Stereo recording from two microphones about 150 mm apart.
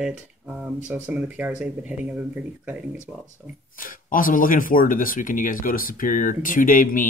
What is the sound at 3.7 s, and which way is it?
Speech, 65° left (ahead or behind).